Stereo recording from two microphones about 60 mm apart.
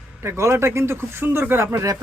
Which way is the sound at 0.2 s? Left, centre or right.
Right.